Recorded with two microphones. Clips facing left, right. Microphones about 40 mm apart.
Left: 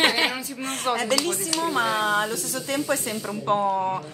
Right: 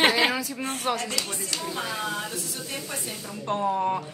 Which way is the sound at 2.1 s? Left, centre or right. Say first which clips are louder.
Left 8 dB; left.